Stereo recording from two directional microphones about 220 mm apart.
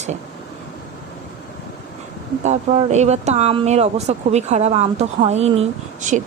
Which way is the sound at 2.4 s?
30° right (ahead or behind).